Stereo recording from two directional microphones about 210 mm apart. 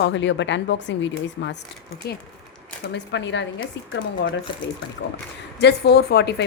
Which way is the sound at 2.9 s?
60° left (ahead or behind).